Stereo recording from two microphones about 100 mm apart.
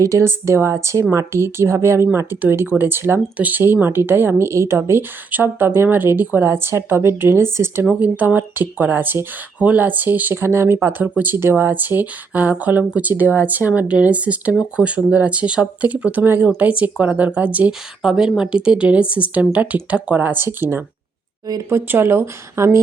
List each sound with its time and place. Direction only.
0.0 s a woman's voice: 30° right (ahead or behind)